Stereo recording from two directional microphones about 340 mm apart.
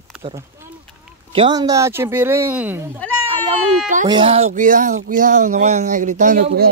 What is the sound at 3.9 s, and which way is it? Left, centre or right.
Speech, centre.